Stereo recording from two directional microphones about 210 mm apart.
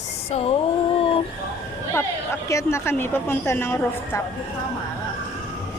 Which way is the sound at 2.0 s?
15° left (ahead or behind).